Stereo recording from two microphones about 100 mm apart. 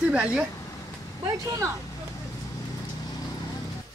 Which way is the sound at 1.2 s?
35° right (ahead or behind).